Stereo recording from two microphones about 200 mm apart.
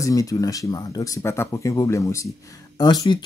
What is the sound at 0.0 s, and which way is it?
Speech, 15° left (ahead or behind).